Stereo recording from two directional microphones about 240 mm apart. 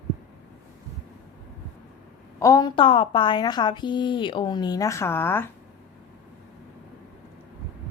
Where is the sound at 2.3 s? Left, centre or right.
Centre.